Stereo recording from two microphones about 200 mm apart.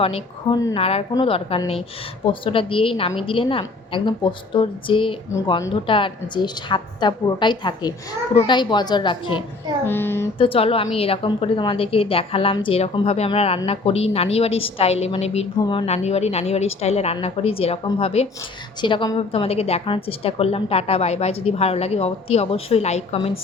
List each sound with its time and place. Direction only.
0.0 s a woman's voice: 30° left (ahead or behind)
9.8 s speech: 10° left (ahead or behind)
10.3 s a woman's voice: 25° left (ahead or behind)
15.6 s a woman's voice: 20° left (ahead or behind)
15.9 s a woman's voice: 30° left (ahead or behind)